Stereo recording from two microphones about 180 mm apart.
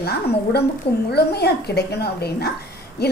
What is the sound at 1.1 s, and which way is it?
A woman's voice, 65° left (ahead or behind).